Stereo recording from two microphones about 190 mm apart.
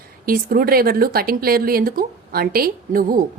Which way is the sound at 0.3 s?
50° right (ahead or behind).